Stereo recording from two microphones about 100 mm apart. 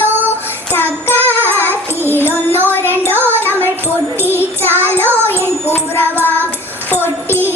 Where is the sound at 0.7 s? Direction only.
20° left (ahead or behind).